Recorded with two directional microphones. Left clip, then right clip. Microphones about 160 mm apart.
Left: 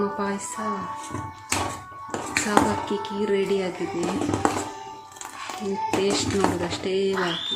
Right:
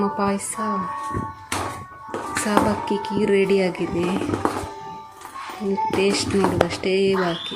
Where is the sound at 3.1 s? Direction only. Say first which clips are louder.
Right 5 dB; 25° right (ahead or behind).